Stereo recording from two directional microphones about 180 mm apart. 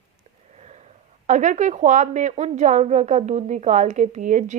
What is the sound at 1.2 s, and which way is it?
A woman's voice, 45° right (ahead or behind).